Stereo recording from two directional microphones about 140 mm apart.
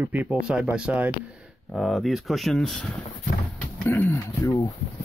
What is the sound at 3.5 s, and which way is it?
Speech, 20° left (ahead or behind).